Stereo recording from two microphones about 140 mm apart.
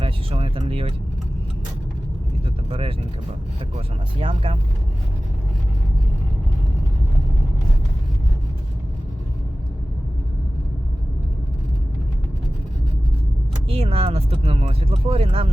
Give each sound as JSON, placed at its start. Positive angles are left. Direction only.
{"t": 0.0, "sound": "a sound", "side_deg": -40}
{"t": 0.7, "sound": "speech", "side_deg": -40}
{"t": 2.6, "sound": "speech", "side_deg": -40}
{"t": 13.7, "sound": "speech", "side_deg": -45}